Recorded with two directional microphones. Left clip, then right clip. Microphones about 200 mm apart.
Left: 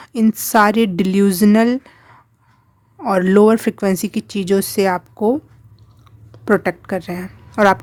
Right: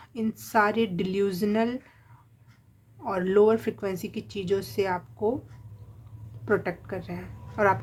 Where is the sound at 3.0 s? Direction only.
60° left (ahead or behind).